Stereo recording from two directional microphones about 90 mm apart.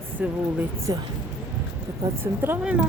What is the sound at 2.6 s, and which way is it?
Speech, 15° right (ahead or behind).